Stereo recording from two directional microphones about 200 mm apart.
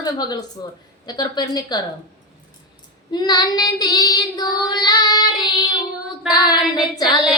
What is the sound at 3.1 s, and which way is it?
A woman's voice, 20° left (ahead or behind).